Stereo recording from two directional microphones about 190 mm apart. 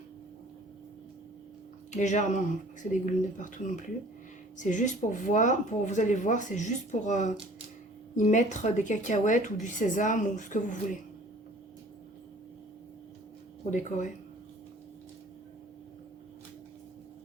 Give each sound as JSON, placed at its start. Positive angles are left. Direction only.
{"t": 1.9, "sound": "speech", "side_deg": 40}
{"t": 13.7, "sound": "speech", "side_deg": 40}